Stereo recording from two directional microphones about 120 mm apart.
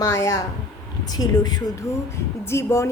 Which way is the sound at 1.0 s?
30° left (ahead or behind).